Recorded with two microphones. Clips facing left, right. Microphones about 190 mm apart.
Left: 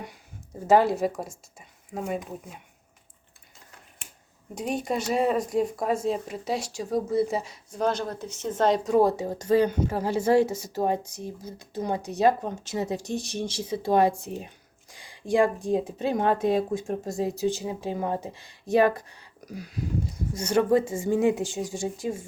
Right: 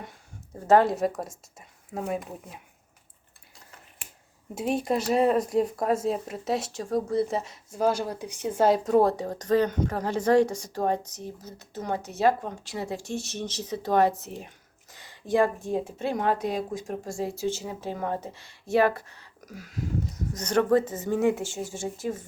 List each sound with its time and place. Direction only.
0.7 s speech: centre (ahead or behind)
4.5 s speech: 5° right (ahead or behind)
8.9 s speech: 5° left (ahead or behind)